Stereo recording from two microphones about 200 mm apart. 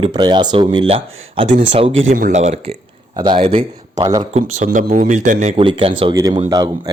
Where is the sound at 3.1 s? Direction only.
25° right (ahead or behind).